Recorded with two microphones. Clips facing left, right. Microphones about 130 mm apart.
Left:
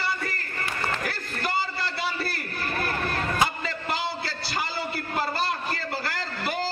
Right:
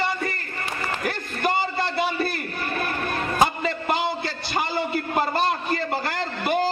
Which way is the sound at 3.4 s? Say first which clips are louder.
Right 5 dB; 20° right (ahead or behind).